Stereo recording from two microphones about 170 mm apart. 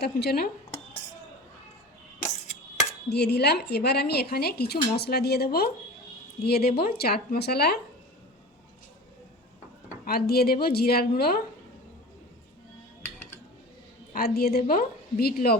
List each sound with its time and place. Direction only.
0.0 s a woman's voice: 70° left (ahead or behind)
3.1 s a woman's voice: 75° left (ahead or behind)
10.1 s a woman's voice: 65° left (ahead or behind)
13.0 s dishes: 15° left (ahead or behind)
14.1 s a woman's voice: 65° left (ahead or behind)